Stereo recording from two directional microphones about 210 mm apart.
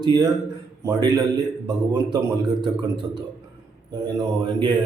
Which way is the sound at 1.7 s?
15° right (ahead or behind).